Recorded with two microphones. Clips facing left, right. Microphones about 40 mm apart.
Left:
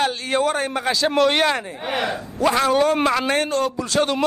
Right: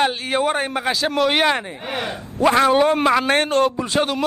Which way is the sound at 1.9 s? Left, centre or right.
Left.